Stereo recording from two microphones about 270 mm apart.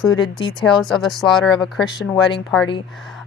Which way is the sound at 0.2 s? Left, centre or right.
Centre.